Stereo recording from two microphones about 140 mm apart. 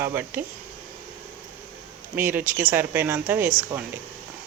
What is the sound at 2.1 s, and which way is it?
Speech, 15° right (ahead or behind).